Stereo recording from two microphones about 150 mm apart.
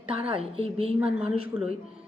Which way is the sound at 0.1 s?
40° right (ahead or behind).